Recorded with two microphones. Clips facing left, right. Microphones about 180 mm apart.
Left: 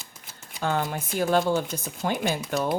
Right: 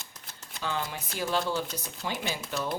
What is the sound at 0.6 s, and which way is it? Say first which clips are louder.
Speech: left 6 dB; 50° left (ahead or behind).